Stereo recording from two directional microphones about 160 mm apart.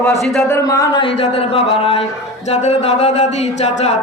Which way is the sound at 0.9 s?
35° left (ahead or behind).